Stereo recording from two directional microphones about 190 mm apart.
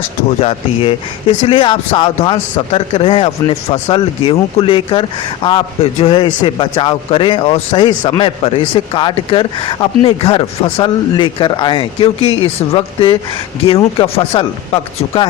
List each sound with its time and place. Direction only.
0.3 s speech: 30° left (ahead or behind)